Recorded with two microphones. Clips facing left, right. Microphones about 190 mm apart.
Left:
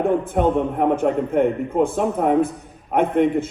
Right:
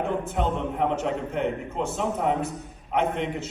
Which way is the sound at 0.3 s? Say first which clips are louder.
Left 7 dB; 55° left (ahead or behind).